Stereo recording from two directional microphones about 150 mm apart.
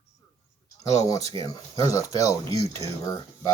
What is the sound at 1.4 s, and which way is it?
Speech, 25° left (ahead or behind).